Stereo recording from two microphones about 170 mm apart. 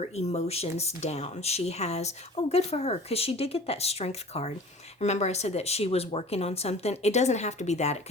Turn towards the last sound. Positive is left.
turn(degrees=40)  # may be behind; listen again after turning